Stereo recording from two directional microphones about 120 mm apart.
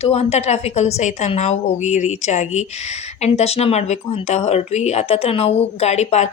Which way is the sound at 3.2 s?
60° left (ahead or behind).